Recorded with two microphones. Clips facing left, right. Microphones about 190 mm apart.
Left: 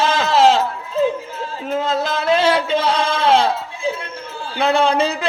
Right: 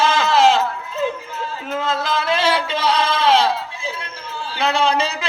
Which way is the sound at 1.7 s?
40° left (ahead or behind).